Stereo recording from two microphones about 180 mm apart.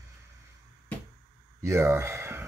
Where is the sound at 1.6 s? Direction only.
15° right (ahead or behind).